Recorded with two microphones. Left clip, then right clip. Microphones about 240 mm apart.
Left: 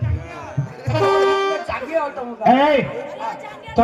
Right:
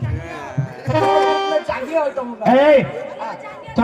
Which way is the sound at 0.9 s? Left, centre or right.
Right.